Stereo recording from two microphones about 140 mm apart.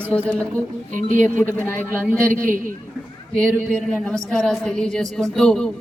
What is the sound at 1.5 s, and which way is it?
Speech, 15° left (ahead or behind).